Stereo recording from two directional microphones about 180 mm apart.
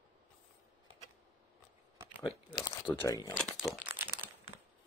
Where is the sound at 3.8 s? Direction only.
10° right (ahead or behind).